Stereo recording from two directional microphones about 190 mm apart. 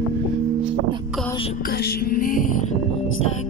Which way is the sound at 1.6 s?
55° left (ahead or behind).